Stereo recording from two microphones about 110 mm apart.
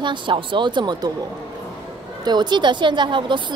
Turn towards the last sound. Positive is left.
turn(degrees=-45)  # may be behind; listen again after turning